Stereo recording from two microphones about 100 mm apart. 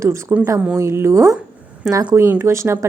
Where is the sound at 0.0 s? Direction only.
30° right (ahead or behind).